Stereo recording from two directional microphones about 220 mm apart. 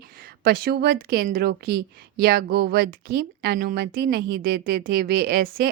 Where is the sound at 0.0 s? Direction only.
40° right (ahead or behind).